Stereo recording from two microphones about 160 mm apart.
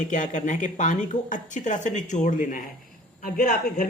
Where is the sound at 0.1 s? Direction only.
55° left (ahead or behind).